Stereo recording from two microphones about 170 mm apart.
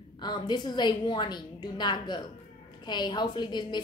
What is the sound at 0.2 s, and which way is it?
A woman's voice, 25° left (ahead or behind).